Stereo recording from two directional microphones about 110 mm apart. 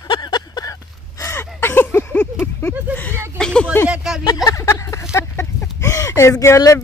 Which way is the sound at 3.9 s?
5° right (ahead or behind).